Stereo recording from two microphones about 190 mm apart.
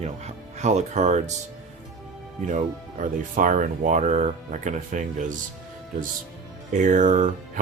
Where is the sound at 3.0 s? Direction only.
45° right (ahead or behind).